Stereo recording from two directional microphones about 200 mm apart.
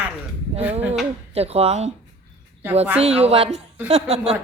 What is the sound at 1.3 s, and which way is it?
Speech, 30° right (ahead or behind).